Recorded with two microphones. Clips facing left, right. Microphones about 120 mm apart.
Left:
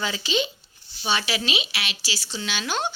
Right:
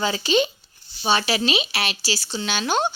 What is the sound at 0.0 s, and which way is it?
A woman's voice, 45° right (ahead or behind).